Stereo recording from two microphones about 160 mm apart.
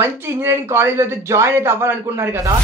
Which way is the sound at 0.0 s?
15° right (ahead or behind).